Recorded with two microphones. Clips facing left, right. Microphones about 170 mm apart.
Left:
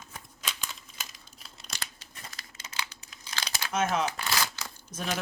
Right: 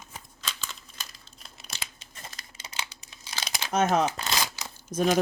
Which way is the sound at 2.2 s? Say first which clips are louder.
Right 2 dB; 15° right (ahead or behind).